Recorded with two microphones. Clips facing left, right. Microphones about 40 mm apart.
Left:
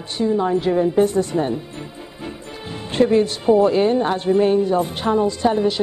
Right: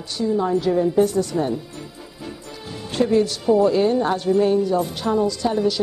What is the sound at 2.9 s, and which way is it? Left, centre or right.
A woman's voice, left.